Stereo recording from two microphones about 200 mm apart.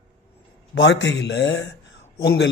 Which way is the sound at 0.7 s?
65° left (ahead or behind).